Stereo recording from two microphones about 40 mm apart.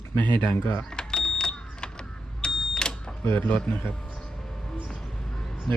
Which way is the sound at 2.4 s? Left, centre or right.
Centre.